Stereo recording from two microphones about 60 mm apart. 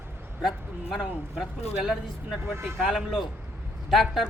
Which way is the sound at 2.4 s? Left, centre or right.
Right.